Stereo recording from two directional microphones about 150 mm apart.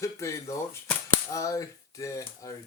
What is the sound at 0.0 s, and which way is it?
Speech, 20° left (ahead or behind).